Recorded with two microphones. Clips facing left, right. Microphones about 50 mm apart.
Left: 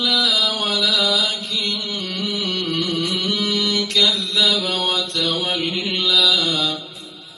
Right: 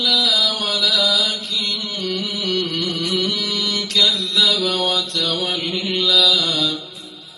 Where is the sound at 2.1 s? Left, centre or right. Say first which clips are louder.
Right 3 dB; centre.